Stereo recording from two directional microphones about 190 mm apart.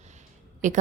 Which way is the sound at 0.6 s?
40° right (ahead or behind).